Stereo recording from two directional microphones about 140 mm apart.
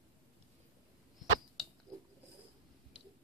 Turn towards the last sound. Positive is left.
turn(degrees=-5)  # may be behind; listen again after turning